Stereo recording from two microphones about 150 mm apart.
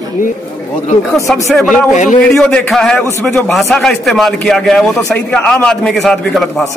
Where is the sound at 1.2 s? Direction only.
Centre (ahead or behind).